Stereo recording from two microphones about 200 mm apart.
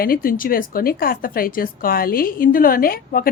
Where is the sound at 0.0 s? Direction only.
45° left (ahead or behind).